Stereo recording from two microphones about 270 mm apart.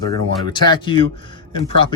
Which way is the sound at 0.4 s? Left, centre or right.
Centre.